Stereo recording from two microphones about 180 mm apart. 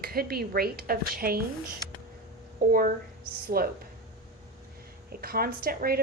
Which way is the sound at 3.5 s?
55° right (ahead or behind).